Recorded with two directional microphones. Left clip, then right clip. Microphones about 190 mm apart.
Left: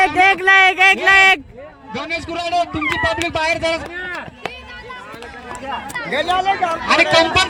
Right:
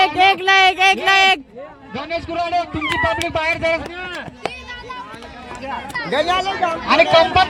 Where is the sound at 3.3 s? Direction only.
50° left (ahead or behind).